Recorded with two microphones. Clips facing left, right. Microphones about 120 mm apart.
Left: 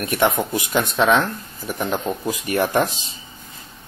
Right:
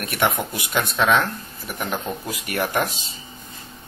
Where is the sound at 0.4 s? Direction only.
25° left (ahead or behind).